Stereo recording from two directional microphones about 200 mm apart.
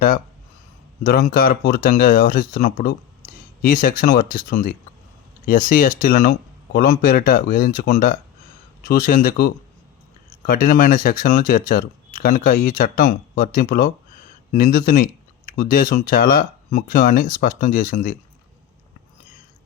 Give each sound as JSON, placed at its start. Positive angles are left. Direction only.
{"t": 1.0, "sound": "speech", "side_deg": 45}